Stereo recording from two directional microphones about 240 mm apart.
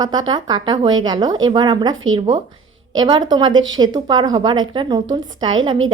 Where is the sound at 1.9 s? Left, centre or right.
Right.